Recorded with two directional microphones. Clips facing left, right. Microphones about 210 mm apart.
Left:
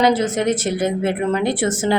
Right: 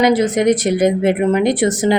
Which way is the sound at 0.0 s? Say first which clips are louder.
Right 4 dB; 15° right (ahead or behind).